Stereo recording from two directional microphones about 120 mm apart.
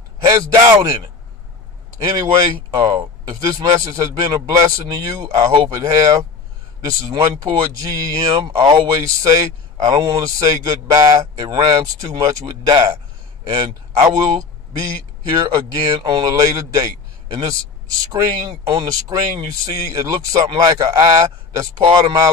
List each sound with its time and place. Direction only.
0.2 s a sound: 25° right (ahead or behind)
2.0 s a man's voice: 30° right (ahead or behind)
18.7 s speech: 35° right (ahead or behind)